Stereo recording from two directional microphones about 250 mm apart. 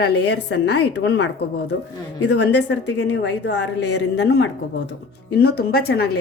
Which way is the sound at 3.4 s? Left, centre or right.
Left.